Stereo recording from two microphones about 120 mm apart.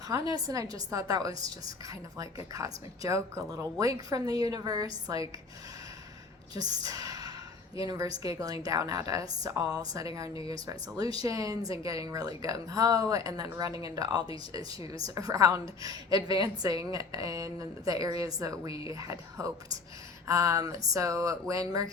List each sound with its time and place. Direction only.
0.1 s a woman's voice: 30° right (ahead or behind)
6.8 s a sound: 30° right (ahead or behind)
7.8 s a woman's voice: 30° right (ahead or behind)